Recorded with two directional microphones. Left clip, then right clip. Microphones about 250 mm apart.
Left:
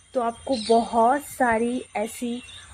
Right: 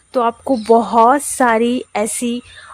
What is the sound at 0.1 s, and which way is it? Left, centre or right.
Speech, right.